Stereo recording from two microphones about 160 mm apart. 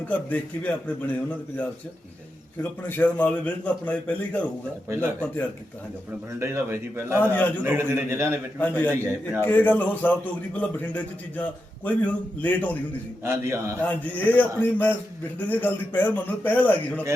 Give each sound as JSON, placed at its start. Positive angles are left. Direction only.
{"t": 0.3, "sound": "a man's voice", "side_deg": 10}
{"t": 2.8, "sound": "a man's voice", "side_deg": 10}
{"t": 6.4, "sound": "a man's voice", "side_deg": -15}
{"t": 7.3, "sound": "a man's voice", "side_deg": 10}
{"t": 7.6, "sound": "a man's voice", "side_deg": -15}
{"t": 8.5, "sound": "a man's voice", "side_deg": 10}
{"t": 8.9, "sound": "a man's voice", "side_deg": -15}
{"t": 9.4, "sound": "a man's voice", "side_deg": 10}
{"t": 13.2, "sound": "a man's voice", "side_deg": -15}
{"t": 13.8, "sound": "a man's voice", "side_deg": 10}